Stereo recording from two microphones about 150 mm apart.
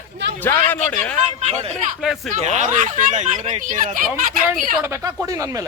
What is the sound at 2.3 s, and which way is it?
Speech, 60° right (ahead or behind).